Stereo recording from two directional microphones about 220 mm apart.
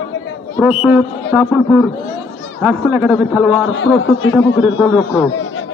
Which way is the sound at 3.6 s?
60° left (ahead or behind).